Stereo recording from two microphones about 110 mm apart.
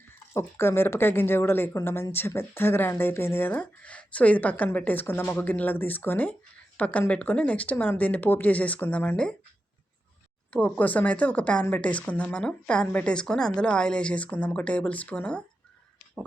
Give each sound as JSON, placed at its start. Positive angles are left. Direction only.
{"t": 0.3, "sound": "speech", "side_deg": 20}
{"t": 10.5, "sound": "speech", "side_deg": 15}